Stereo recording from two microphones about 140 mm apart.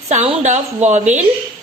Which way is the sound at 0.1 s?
55° right (ahead or behind).